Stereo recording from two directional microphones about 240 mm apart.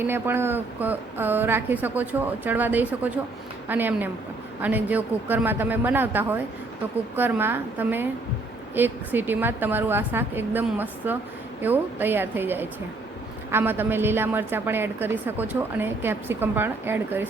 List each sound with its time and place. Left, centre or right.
0.0 s a woman's voice: centre